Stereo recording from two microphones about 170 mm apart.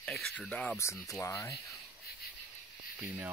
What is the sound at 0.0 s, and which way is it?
Speech, centre (ahead or behind).